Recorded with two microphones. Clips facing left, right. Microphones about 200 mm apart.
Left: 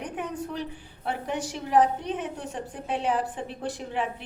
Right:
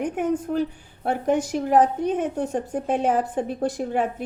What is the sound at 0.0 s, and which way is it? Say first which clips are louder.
A woman's voice: right 9 dB; 45° right (ahead or behind).